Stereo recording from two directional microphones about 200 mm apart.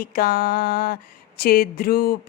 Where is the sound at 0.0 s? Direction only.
50° left (ahead or behind).